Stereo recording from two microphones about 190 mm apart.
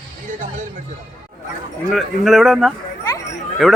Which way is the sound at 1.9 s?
Centre (ahead or behind).